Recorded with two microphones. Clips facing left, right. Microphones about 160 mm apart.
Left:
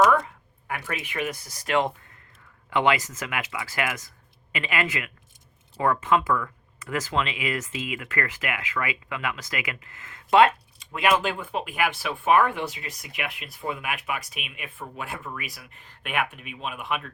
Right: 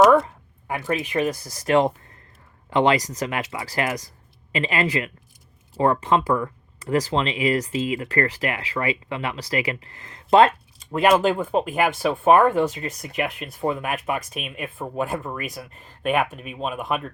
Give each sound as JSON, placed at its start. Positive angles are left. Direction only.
{"t": 1.1, "sound": "speech", "side_deg": -30}